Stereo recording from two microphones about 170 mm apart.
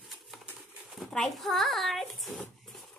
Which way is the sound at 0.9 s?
Centre (ahead or behind).